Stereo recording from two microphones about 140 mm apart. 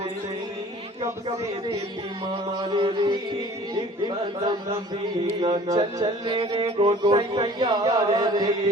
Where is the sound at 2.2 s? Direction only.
30° right (ahead or behind).